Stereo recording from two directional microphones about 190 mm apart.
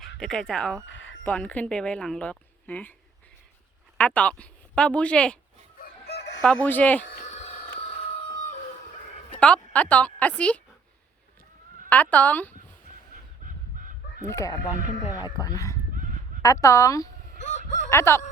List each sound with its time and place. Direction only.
0.2 s a woman's voice: 5° left (ahead or behind)
3.9 s speech: 5° left (ahead or behind)
5.8 s chicken: 60° left (ahead or behind)
6.4 s a woman's voice: 5° left (ahead or behind)
7.2 s a sound: 35° left (ahead or behind)
9.4 s a woman's voice: 5° left (ahead or behind)
11.9 s a woman's voice: 10° left (ahead or behind)
13.4 s fowl: 45° right (ahead or behind)
14.3 s a woman's voice: 15° left (ahead or behind)
17.4 s chicken: 40° left (ahead or behind)
17.8 s snicker: 15° left (ahead or behind)